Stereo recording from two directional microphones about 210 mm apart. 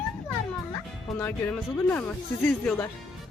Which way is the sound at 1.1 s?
10° left (ahead or behind).